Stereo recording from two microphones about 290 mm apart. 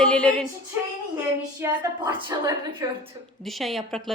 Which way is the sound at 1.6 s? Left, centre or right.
Centre.